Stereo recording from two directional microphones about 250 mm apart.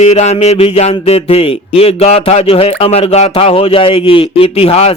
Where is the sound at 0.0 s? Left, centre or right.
Left.